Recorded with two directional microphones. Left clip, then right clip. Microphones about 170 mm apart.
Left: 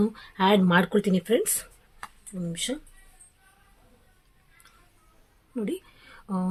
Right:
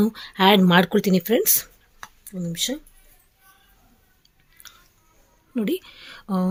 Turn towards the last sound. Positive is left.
turn(degrees=-55)  # may be behind; listen again after turning